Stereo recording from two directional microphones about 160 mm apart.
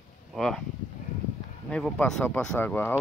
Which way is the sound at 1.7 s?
5° left (ahead or behind).